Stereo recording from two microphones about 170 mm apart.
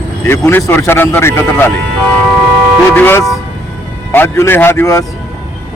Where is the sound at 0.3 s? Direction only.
10° left (ahead or behind).